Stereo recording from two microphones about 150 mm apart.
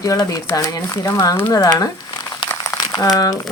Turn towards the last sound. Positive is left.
turn(degrees=25)  # may be behind; listen again after turning